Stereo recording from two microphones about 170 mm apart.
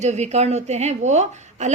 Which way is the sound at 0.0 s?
40° right (ahead or behind).